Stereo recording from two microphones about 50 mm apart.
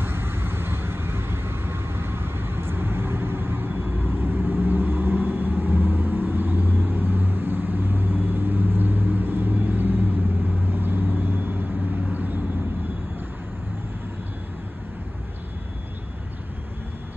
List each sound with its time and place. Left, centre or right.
0.0 s vehicle: right